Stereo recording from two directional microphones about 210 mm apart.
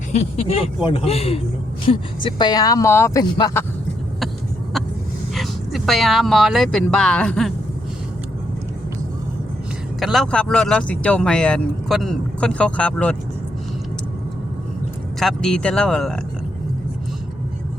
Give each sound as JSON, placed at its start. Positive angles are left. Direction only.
{"t": 0.1, "sound": "speech", "side_deg": 30}
{"t": 5.3, "sound": "speech", "side_deg": 0}
{"t": 10.0, "sound": "speech", "side_deg": 0}
{"t": 15.2, "sound": "speech", "side_deg": 0}